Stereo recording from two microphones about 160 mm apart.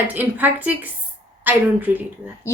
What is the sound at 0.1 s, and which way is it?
A woman's voice, 10° right (ahead or behind).